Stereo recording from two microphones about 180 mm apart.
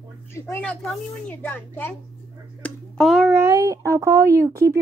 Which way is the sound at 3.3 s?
15° right (ahead or behind).